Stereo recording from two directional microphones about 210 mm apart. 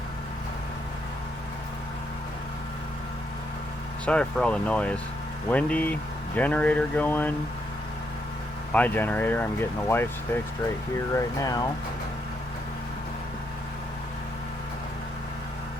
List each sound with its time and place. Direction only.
4.0 s speech: 5° left (ahead or behind)
8.7 s speech: 10° left (ahead or behind)